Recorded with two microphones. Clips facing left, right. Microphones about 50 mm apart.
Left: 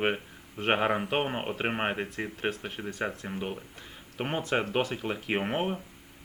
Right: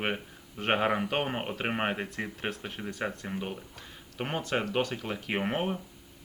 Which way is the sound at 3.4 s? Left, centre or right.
Left.